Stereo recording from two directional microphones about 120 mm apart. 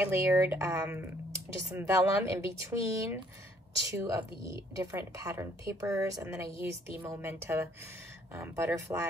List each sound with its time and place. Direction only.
0.0 s speech: 25° right (ahead or behind)
0.7 s speech: 10° right (ahead or behind)
1.8 s speech: 25° right (ahead or behind)